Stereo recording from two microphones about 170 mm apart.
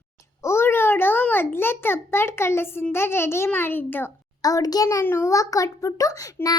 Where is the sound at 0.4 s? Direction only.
15° left (ahead or behind).